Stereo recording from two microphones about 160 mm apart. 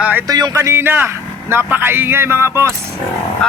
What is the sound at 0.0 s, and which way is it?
Music, 10° right (ahead or behind).